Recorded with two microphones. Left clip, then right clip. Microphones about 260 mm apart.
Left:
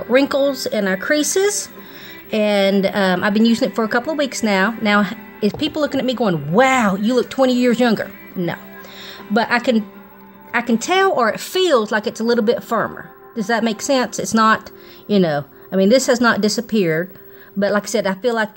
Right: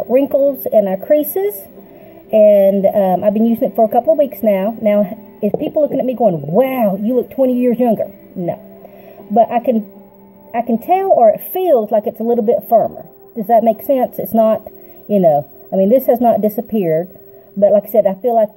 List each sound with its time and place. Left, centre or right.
0.1 s a woman's voice: left
2.3 s a woman's voice: left